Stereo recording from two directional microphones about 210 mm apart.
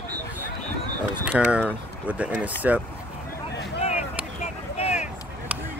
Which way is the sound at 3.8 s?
30° left (ahead or behind).